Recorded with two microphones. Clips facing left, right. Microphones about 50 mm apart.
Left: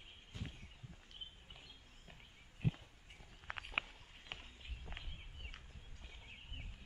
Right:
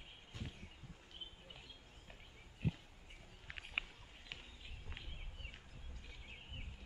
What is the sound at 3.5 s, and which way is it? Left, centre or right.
Walk, left.